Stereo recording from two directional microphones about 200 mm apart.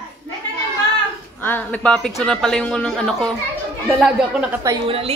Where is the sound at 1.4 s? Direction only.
10° left (ahead or behind).